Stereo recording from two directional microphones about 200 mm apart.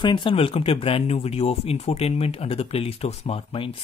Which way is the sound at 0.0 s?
25° left (ahead or behind).